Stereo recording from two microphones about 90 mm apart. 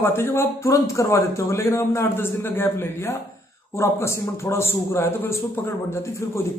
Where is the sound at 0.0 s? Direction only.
25° left (ahead or behind).